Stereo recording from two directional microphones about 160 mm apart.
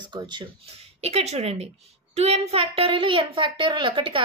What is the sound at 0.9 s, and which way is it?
A child's voice, 40° right (ahead or behind).